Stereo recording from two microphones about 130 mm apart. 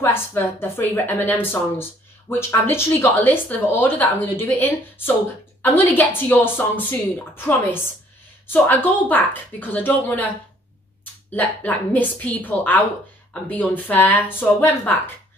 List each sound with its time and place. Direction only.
0.0 s speech: 15° left (ahead or behind)
11.3 s speech: 10° left (ahead or behind)